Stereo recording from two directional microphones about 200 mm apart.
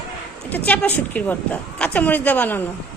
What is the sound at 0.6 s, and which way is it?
A woman's voice, 5° left (ahead or behind).